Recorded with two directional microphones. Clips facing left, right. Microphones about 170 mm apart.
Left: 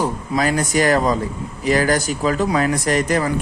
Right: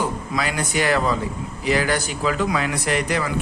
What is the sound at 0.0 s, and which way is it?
A man's voice, 40° left (ahead or behind).